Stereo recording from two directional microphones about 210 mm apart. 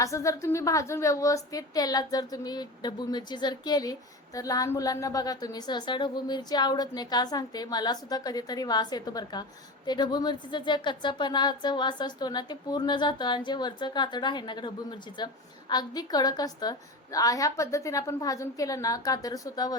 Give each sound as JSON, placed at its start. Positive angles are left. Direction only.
{"t": 0.0, "sound": "a woman's voice", "side_deg": 15}